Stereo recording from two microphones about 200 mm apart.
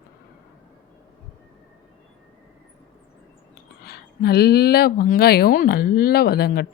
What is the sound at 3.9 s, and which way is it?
Speech, 50° left (ahead or behind).